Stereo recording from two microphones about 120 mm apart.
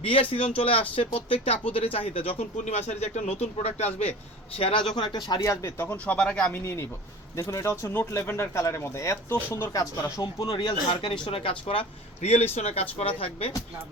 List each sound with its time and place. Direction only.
0.0 s speech: 50° left (ahead or behind)
4.5 s speech: 50° left (ahead or behind)
4.9 s speech: 40° left (ahead or behind); by 6.6 s 10° left (ahead or behind)
7.3 s speech: 25° left (ahead or behind)
9.7 s speech: 30° left (ahead or behind)
10.5 s speech: 40° left (ahead or behind)